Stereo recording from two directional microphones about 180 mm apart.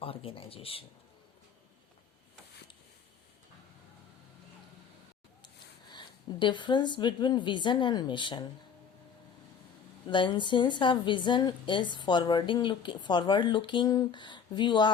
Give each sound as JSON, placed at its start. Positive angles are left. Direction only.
{"t": 0.0, "sound": "speech", "side_deg": 30}
{"t": 5.9, "sound": "a woman's voice", "side_deg": 25}
{"t": 10.1, "sound": "a woman's voice", "side_deg": 25}